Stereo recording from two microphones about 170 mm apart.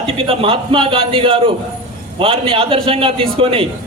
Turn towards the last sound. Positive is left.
turn(degrees=-30)  # may be behind; listen again after turning